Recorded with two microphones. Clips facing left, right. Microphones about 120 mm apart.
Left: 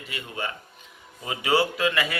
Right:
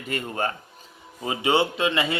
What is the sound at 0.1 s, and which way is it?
Speech, 45° right (ahead or behind).